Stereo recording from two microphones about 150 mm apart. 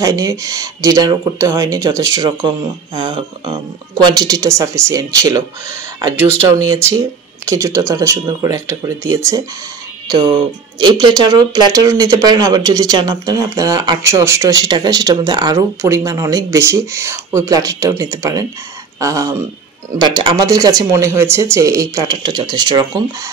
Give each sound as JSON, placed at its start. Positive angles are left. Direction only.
{"t": 0.0, "sound": "speech", "side_deg": -20}
{"t": 10.8, "sound": "speech", "side_deg": -30}